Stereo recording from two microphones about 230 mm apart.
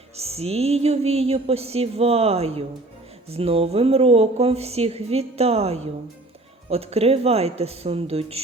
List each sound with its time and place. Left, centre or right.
0.2 s speech: right